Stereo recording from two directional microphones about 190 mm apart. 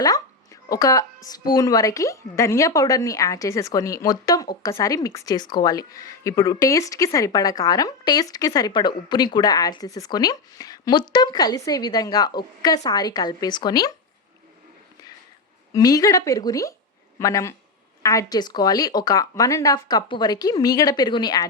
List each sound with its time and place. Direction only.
0.0 s speech: 20° left (ahead or behind)
15.7 s speech: 20° left (ahead or behind)